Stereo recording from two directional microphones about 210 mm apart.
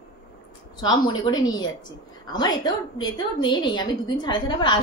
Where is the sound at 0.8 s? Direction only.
20° left (ahead or behind).